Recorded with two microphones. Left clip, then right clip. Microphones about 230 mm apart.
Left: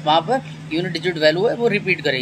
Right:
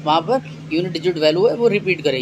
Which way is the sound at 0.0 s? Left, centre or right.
Left.